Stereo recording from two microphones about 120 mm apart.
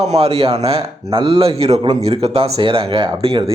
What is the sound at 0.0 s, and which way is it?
Speech, 60° right (ahead or behind).